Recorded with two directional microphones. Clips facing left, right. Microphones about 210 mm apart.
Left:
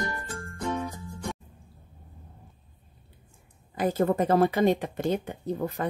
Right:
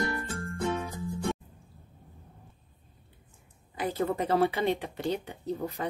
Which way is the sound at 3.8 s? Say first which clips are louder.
Left 5 dB; 45° left (ahead or behind).